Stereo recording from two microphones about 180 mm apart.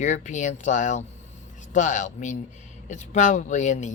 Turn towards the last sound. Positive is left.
turn(degrees=40)  # may be behind; listen again after turning